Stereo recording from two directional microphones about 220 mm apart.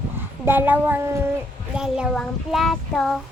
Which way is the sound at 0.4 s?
10° right (ahead or behind).